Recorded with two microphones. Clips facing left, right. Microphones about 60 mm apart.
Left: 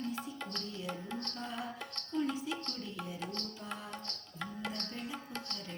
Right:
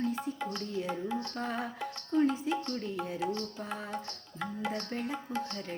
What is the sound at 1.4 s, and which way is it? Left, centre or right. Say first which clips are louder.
Music: right 7 dB; right.